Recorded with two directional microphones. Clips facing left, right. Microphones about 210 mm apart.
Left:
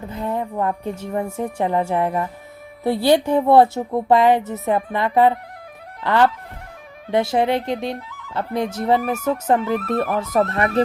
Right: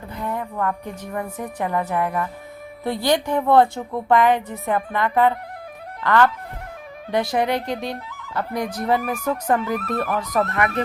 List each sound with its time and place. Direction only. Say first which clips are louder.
0.1 s speech: left 3 dB; 25° left (ahead or behind)